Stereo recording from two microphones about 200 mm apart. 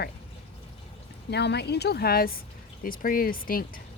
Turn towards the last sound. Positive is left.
turn(degrees=45)  # may be behind; listen again after turning